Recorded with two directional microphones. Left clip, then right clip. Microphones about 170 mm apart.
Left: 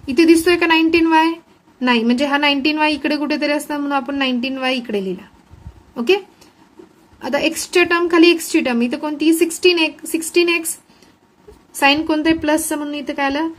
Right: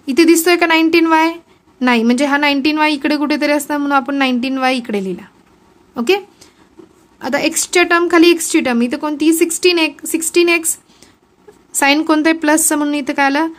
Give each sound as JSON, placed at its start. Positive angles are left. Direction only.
{"t": 0.0, "sound": "a woman's voice", "side_deg": -35}
{"t": 11.8, "sound": "a woman's voice", "side_deg": -45}